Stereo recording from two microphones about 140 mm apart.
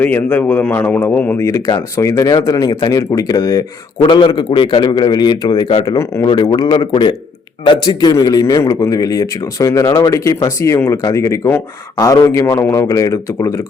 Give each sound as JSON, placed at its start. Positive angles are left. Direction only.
{"t": 0.0, "sound": "a man's voice", "side_deg": 15}
{"t": 1.5, "sound": "a man's voice", "side_deg": 25}
{"t": 5.8, "sound": "a man's voice", "side_deg": 25}
{"t": 6.2, "sound": "a man's voice", "side_deg": 35}